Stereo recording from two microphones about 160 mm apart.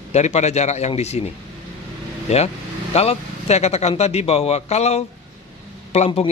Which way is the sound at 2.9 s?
40° left (ahead or behind).